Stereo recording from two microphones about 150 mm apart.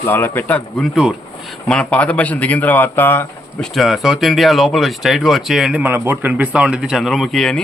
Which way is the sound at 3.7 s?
Centre (ahead or behind).